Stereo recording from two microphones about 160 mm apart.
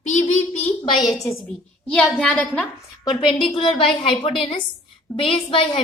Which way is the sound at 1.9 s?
5° left (ahead or behind).